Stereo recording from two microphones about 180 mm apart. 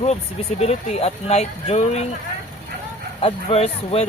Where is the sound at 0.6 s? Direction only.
35° left (ahead or behind).